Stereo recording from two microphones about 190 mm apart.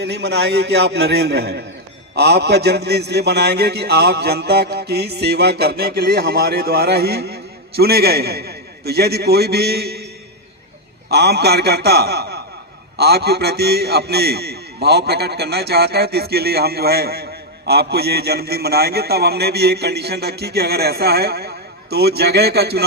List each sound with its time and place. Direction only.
0.0 s a man's voice: 65° right (ahead or behind)
11.1 s a man's voice: 60° right (ahead or behind)